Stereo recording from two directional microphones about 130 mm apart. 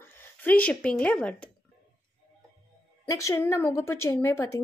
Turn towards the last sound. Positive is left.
turn(degrees=20)  # may be behind; listen again after turning